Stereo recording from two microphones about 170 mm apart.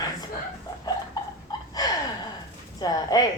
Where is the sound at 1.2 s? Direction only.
20° left (ahead or behind).